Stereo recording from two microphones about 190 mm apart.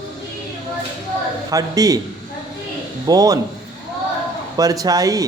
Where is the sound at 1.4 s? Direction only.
20° right (ahead or behind).